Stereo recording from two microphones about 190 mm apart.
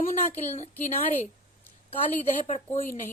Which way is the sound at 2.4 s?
35° left (ahead or behind).